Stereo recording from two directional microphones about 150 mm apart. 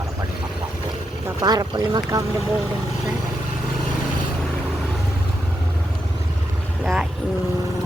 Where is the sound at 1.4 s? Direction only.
25° right (ahead or behind).